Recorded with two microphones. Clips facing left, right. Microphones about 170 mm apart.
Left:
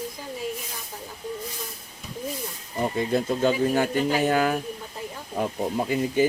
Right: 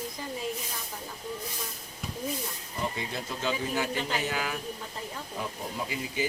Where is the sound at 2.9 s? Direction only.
50° left (ahead or behind).